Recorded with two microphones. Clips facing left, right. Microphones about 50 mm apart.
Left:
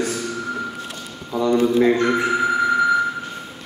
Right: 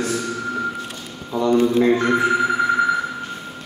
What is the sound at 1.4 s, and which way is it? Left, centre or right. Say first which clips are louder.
Speech: even; left.